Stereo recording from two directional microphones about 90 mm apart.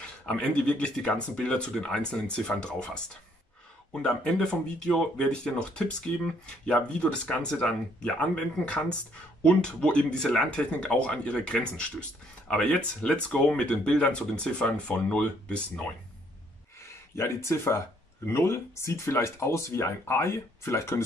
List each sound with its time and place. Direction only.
0.0 s speech: 15° left (ahead or behind)
16.8 s speech: 30° left (ahead or behind)